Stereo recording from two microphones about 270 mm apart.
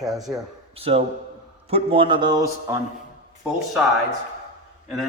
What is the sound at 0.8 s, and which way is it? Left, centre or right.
A man's voice, right.